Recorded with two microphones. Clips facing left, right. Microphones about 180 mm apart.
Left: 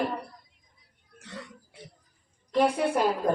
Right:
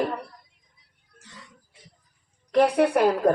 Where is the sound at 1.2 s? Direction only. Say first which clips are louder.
Left 8 dB; 65° left (ahead or behind).